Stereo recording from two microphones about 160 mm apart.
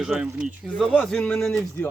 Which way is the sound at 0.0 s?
5° right (ahead or behind).